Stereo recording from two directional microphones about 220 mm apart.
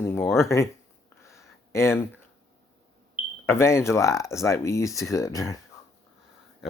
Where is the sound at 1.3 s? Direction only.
15° left (ahead or behind).